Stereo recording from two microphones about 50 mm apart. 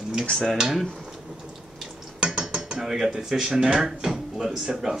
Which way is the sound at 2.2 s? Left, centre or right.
Centre.